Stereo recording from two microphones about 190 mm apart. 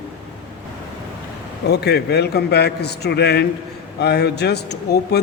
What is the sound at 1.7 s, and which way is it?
Speech, 60° left (ahead or behind).